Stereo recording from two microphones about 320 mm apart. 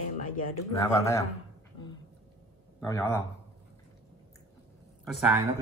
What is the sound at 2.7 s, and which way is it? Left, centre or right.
Speech, centre.